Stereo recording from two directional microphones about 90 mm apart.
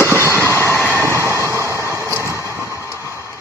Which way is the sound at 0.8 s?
30° right (ahead or behind).